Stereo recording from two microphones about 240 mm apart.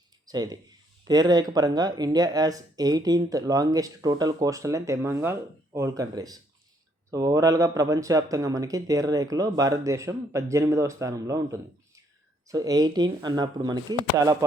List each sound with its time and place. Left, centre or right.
0.3 s speech: centre